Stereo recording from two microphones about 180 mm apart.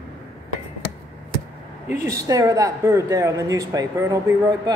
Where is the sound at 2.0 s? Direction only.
20° right (ahead or behind).